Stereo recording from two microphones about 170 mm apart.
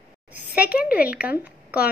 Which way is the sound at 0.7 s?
65° left (ahead or behind).